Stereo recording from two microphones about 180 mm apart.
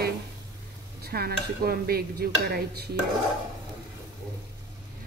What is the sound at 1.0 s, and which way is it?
A woman's voice, 60° right (ahead or behind).